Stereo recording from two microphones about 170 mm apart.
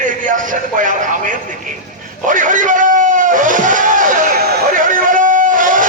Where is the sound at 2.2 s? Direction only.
50° right (ahead or behind).